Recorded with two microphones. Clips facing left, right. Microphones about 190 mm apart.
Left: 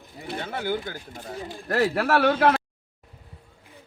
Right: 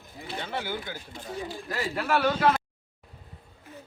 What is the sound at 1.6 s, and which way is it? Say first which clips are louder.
Speech: left 9 dB; 70° left (ahead or behind).